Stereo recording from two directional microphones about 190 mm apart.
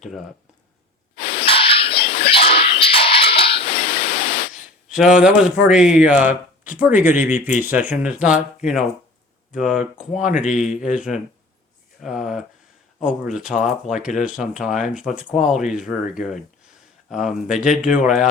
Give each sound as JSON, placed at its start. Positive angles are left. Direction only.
{"t": 1.1, "sound": "a sound", "side_deg": 30}
{"t": 4.5, "sound": "speech", "side_deg": -5}
{"t": 9.6, "sound": "speech", "side_deg": -5}